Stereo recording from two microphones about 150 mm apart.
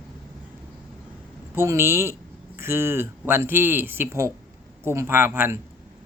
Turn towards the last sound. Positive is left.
turn(degrees=-15)  # may be behind; listen again after turning